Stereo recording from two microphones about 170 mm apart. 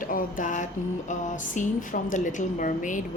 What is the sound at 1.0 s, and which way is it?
Speech, 45° left (ahead or behind).